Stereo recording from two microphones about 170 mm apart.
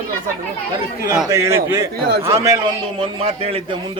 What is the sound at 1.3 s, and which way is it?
Speech, 15° right (ahead or behind).